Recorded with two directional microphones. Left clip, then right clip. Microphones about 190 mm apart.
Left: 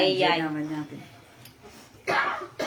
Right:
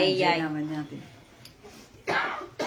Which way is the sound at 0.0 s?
20° right (ahead or behind).